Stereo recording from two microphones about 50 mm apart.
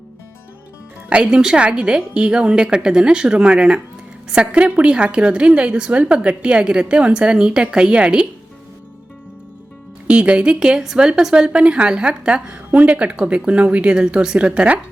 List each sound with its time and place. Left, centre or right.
1.1 s a woman's voice: centre
10.1 s a woman's voice: right